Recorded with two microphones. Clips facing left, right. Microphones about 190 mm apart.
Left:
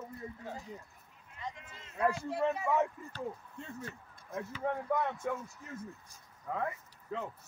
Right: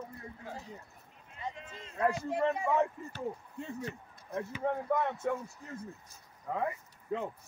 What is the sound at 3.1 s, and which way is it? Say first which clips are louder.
Speech: right 2 dB; 15° right (ahead or behind).